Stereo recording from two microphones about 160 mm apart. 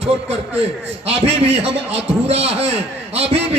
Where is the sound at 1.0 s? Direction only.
40° right (ahead or behind).